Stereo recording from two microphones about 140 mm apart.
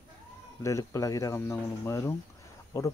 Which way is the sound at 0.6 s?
20° left (ahead or behind).